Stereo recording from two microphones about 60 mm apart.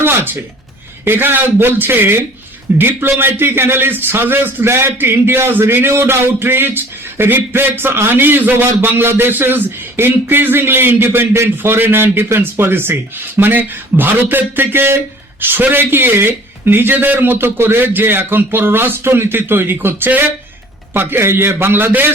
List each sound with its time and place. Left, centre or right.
1.0 s a man's voice: right